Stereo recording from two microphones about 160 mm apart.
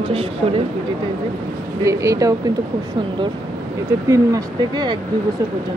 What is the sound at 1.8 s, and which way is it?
Speech, 20° right (ahead or behind).